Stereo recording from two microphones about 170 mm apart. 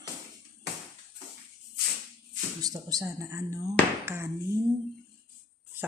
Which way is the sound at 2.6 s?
20° right (ahead or behind).